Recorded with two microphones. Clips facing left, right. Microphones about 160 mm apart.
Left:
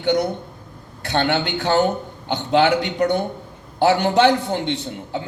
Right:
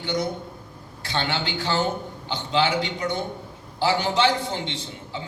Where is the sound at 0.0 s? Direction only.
60° left (ahead or behind).